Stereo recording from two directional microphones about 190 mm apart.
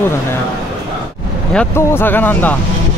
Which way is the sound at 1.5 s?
10° left (ahead or behind).